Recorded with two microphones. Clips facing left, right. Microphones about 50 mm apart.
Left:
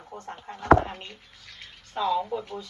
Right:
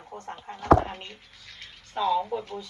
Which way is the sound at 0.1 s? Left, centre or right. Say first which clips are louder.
Even; right.